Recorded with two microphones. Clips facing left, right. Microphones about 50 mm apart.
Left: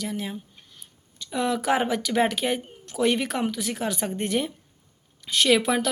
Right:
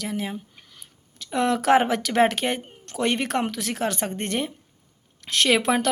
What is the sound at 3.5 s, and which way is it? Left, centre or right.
Speech, right.